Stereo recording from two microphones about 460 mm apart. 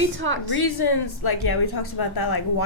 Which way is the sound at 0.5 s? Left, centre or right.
Left.